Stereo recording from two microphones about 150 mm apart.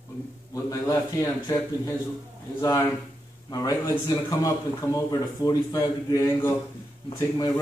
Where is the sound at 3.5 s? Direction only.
25° left (ahead or behind).